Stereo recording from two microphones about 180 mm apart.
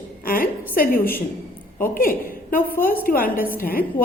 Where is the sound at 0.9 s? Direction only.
10° left (ahead or behind).